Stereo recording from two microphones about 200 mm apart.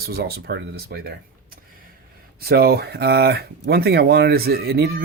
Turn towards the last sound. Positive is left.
turn(degrees=-55)  # may be behind; listen again after turning